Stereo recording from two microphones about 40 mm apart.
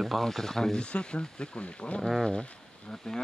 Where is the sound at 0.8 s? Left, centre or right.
Left.